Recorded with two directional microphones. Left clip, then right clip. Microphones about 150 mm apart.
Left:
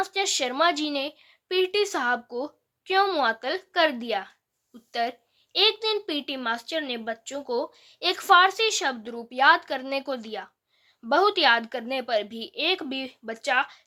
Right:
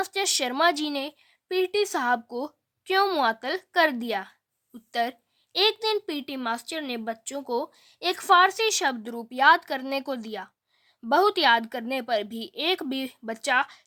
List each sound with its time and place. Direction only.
0.0 s a woman's voice: 40° right (ahead or behind)
1.5 s a woman's voice: 25° right (ahead or behind); by 13.8 s 45° right (ahead or behind)